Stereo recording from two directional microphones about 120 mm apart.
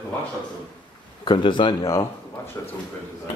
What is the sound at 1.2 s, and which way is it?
Speech, 45° left (ahead or behind).